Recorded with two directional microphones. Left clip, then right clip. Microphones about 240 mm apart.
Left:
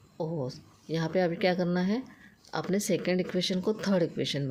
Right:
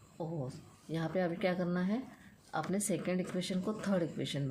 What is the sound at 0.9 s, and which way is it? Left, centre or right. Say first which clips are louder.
Speech: left 7 dB; left.